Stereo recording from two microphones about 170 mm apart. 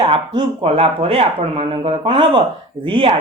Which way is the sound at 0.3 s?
35° right (ahead or behind).